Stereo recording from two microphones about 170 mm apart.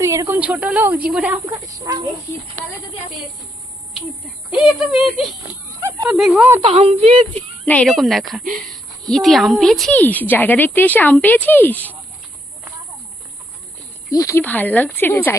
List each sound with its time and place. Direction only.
0.0 s a sound: 20° right (ahead or behind)
0.3 s speech: 10° right (ahead or behind)
1.5 s speech: 20° right (ahead or behind)
4.5 s speech: centre (ahead or behind)
6.6 s a woman's voice: 35° right (ahead or behind)
7.6 s a woman's voice: 10° left (ahead or behind)
14.1 s a woman's voice: 20° left (ahead or behind)